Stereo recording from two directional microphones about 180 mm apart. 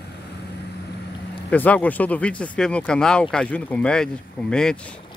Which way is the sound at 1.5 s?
10° left (ahead or behind).